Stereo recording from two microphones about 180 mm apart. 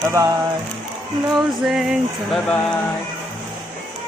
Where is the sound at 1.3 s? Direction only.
Centre (ahead or behind).